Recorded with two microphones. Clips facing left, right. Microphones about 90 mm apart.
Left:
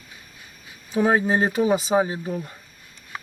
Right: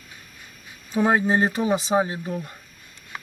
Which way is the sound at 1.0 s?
Centre (ahead or behind).